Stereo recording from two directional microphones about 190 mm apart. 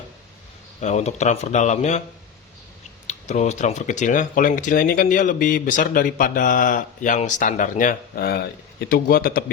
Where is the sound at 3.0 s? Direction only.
35° left (ahead or behind).